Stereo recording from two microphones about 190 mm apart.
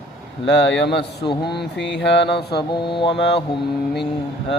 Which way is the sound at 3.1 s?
65° left (ahead or behind).